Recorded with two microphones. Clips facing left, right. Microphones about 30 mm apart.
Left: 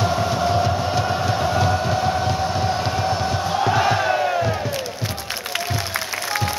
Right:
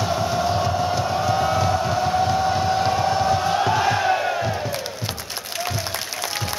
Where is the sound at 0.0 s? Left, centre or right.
Centre.